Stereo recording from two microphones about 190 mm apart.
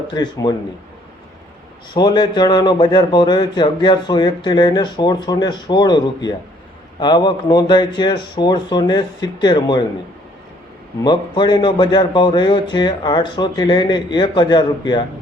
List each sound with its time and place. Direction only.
0.1 s speech: 20° left (ahead or behind)
1.9 s speech: 20° left (ahead or behind)
11.0 s speech: 20° left (ahead or behind)